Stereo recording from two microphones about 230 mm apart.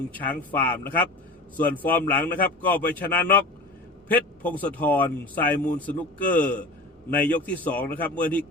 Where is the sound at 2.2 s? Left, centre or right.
Left.